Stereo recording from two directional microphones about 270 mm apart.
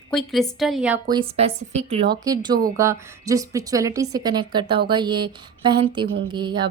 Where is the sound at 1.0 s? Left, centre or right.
Centre.